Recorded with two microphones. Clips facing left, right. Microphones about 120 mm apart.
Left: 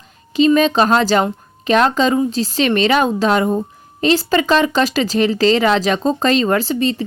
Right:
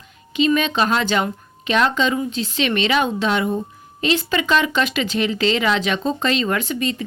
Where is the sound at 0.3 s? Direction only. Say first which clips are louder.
Left 6 dB; 35° left (ahead or behind).